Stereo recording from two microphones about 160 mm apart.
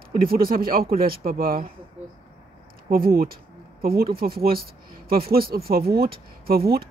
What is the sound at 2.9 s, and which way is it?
Speech, 65° right (ahead or behind).